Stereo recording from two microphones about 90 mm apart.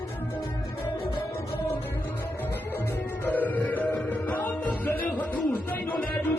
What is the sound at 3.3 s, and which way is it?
Music, 20° left (ahead or behind).